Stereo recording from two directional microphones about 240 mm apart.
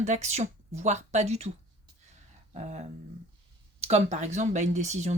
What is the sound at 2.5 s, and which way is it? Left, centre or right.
Speech, right.